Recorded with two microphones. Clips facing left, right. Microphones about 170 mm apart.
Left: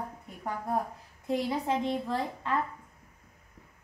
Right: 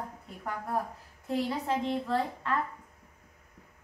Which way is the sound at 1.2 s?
15° left (ahead or behind).